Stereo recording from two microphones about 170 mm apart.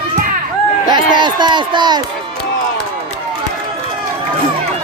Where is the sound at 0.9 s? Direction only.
25° right (ahead or behind).